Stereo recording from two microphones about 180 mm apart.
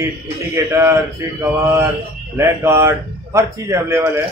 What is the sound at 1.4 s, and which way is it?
Mantra, 15° right (ahead or behind).